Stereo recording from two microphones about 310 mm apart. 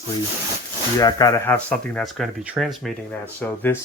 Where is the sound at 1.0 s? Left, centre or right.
Centre.